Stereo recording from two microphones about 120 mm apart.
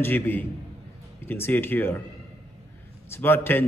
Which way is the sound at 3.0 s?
20° left (ahead or behind).